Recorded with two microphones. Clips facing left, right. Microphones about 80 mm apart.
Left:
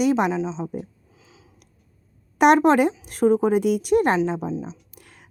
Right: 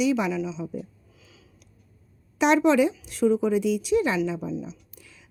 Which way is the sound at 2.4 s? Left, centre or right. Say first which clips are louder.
Left 4 dB; left.